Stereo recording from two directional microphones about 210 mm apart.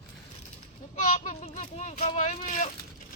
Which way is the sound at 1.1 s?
35° left (ahead or behind).